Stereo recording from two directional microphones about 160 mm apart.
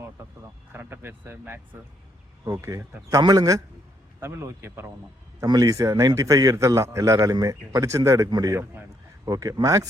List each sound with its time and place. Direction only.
0.7 s a man's voice: 15° right (ahead or behind)